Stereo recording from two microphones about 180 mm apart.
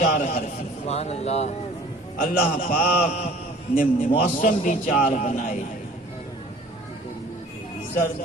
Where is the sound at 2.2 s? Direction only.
50° left (ahead or behind).